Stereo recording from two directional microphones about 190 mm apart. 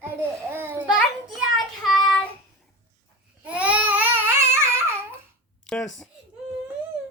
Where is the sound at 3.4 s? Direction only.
5° right (ahead or behind).